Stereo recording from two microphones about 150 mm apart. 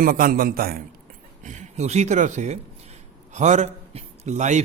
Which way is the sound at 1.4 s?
50° right (ahead or behind).